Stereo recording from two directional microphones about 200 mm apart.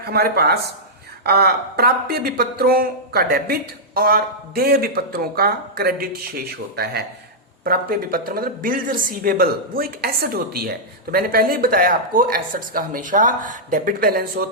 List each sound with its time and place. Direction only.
0.0 s speech: 55° right (ahead or behind)